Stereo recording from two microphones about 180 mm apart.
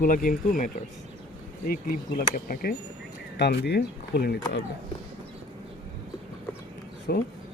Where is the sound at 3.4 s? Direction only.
65° left (ahead or behind).